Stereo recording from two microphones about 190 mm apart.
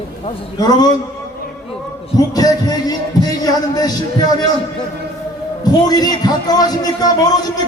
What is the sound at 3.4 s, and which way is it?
Speech, 20° left (ahead or behind).